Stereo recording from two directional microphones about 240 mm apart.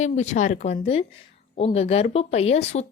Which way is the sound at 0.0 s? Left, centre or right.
Left.